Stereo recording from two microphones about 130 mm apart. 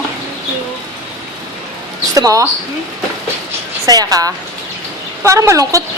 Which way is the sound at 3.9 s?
30° right (ahead or behind).